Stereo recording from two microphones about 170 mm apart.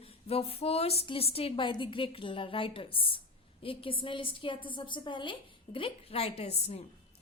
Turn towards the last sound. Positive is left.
turn(degrees=35)  # may be behind; listen again after turning